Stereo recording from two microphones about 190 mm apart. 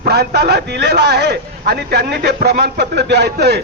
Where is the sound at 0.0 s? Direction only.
60° right (ahead or behind).